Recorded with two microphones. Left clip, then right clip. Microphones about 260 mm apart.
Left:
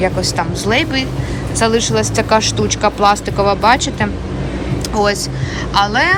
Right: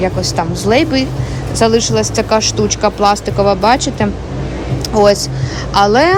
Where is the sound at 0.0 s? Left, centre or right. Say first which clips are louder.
Right 1 dB; centre.